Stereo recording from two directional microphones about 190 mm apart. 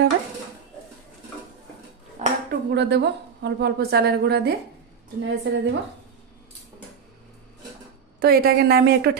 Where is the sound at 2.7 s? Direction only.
65° right (ahead or behind).